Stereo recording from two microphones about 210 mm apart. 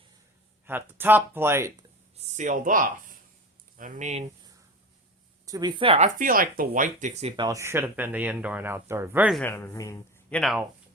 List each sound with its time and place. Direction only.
0.6 s speech: 10° right (ahead or behind)
2.1 s speech: 35° right (ahead or behind)
5.5 s speech: 20° right (ahead or behind)
6.1 s speech: 40° right (ahead or behind)
7.4 s speech: 15° right (ahead or behind)
9.4 s speech: 10° left (ahead or behind)